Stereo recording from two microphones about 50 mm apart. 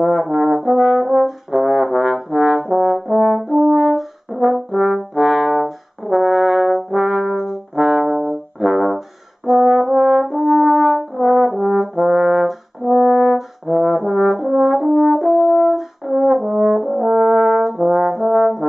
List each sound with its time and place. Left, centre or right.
0.0 s brass instrument: centre
9.5 s french horn: centre
12.9 s brass instrument: centre
14.5 s french horn: centre